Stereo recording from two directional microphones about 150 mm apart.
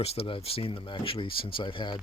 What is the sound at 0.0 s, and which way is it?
Speech, 40° left (ahead or behind).